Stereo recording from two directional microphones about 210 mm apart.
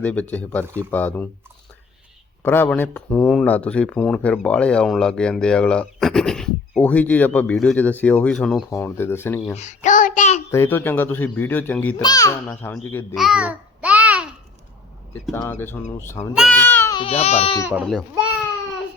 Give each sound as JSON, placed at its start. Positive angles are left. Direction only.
{"t": 0.0, "sound": "speech", "side_deg": 5}
{"t": 2.4, "sound": "speech", "side_deg": 10}
{"t": 9.6, "sound": "child singing", "side_deg": 35}
{"t": 10.5, "sound": "speech", "side_deg": 10}
{"t": 13.1, "sound": "babbling", "side_deg": -5}
{"t": 15.1, "sound": "speech", "side_deg": 10}
{"t": 16.3, "sound": "speech", "side_deg": 0}
{"t": 16.6, "sound": "baby cry", "side_deg": 10}
{"t": 17.0, "sound": "speech", "side_deg": 30}
{"t": 17.7, "sound": "speech", "side_deg": -5}